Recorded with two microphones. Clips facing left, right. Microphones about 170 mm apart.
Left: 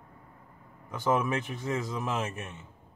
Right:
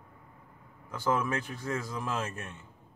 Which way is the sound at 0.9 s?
15° left (ahead or behind).